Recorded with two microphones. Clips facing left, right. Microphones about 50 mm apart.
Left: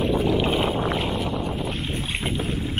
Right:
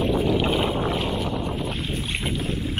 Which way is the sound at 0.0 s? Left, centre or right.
Centre.